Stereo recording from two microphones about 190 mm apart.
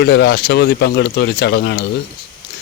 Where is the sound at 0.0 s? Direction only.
65° left (ahead or behind).